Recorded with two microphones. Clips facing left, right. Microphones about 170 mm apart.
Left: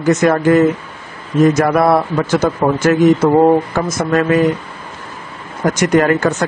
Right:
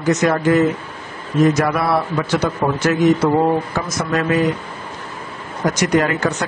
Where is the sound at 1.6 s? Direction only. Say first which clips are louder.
Left 5 dB; 50° left (ahead or behind).